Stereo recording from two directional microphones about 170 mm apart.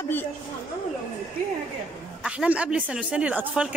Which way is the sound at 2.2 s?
5° right (ahead or behind).